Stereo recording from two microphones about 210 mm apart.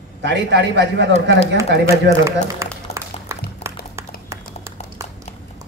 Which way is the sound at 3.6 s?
30° left (ahead or behind).